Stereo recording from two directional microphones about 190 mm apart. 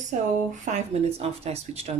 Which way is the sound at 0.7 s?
35° right (ahead or behind).